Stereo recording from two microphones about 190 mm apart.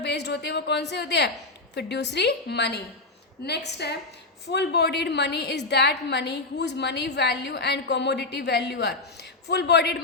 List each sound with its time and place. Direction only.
0.0 s a woman's voice: 65° left (ahead or behind)